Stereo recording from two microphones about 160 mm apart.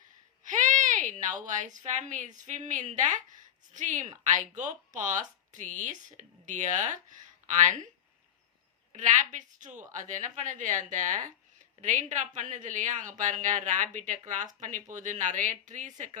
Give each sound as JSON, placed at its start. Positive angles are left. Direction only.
{"t": 0.4, "sound": "a woman's voice", "side_deg": -50}
{"t": 8.9, "sound": "a woman's voice", "side_deg": -50}